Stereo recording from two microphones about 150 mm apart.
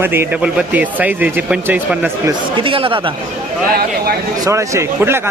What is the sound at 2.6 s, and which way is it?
Speech, 35° right (ahead or behind).